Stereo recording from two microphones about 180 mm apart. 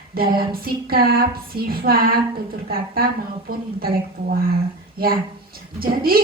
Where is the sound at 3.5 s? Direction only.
55° right (ahead or behind).